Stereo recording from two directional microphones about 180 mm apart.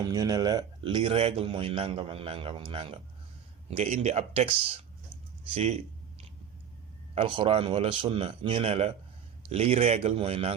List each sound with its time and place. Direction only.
0.0 s a man's voice: 20° right (ahead or behind)
5.1 s a sound: 5° left (ahead or behind)
7.2 s a man's voice: 30° right (ahead or behind)